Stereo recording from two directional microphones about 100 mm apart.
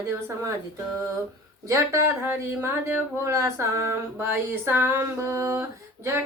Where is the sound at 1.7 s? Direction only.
25° right (ahead or behind).